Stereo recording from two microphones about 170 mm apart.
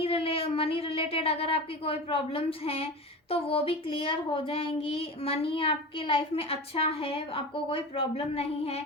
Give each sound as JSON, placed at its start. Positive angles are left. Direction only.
{"t": 0.0, "sound": "speech", "side_deg": 35}